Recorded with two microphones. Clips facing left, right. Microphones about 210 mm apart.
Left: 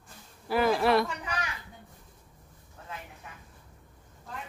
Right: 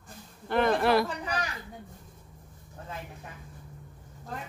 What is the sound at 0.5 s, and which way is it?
Speech, 5° left (ahead or behind).